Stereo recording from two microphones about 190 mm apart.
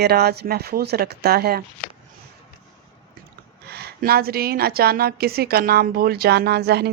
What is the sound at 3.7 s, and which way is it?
A woman's voice, 55° right (ahead or behind).